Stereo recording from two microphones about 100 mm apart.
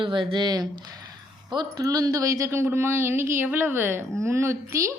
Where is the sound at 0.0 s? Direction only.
55° right (ahead or behind).